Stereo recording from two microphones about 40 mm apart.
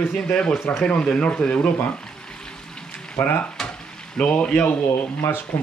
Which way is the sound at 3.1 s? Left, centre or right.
Left.